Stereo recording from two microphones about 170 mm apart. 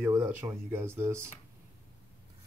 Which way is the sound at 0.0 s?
15° right (ahead or behind).